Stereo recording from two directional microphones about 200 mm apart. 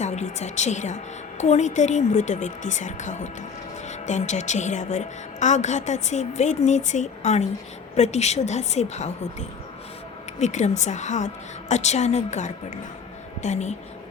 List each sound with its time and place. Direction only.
0.0 s speech: 35° left (ahead or behind)
10.4 s speech: 35° left (ahead or behind)